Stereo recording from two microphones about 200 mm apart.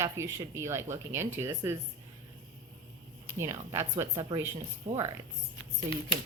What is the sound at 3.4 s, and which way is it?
A woman's voice, 15° right (ahead or behind).